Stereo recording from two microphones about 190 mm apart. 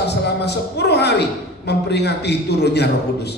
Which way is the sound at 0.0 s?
60° left (ahead or behind).